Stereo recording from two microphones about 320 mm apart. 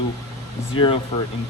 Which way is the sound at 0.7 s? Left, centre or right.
Centre.